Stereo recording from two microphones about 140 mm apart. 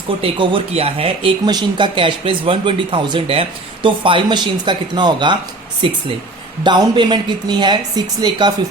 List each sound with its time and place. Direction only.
0.2 s speech: 40° right (ahead or behind)
1.5 s speech: 30° right (ahead or behind)